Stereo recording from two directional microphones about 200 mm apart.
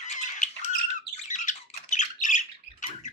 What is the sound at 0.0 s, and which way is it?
Squawk, 35° left (ahead or behind).